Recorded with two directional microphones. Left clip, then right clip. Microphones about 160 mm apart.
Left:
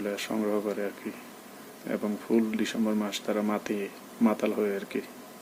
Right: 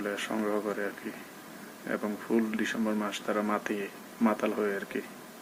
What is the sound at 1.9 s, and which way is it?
Speech, 20° left (ahead or behind).